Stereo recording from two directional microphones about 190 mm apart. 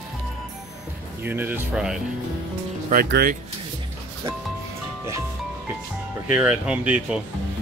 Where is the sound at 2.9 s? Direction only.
55° right (ahead or behind).